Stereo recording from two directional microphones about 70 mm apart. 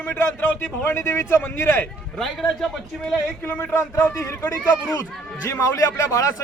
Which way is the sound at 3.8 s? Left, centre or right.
Left.